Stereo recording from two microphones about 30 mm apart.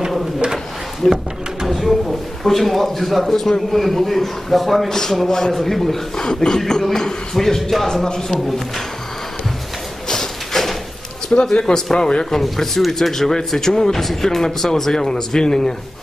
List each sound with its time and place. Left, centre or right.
1.0 s speech: centre
1.7 s a sound: centre
3.3 s a man's voice: centre
4.8 s speech: centre
5.6 s speech: centre
6.1 s speech: left
8.5 s a man's voice: centre
10.0 s a sound: centre
11.3 s speech: left
11.6 s speech: centre